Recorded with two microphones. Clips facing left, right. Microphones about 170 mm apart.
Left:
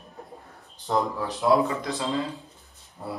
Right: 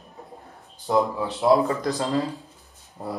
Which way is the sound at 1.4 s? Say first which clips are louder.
Right 3 dB; 35° right (ahead or behind).